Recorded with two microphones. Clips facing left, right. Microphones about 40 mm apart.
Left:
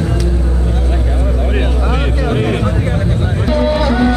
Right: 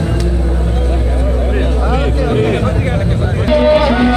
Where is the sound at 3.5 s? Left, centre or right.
Right.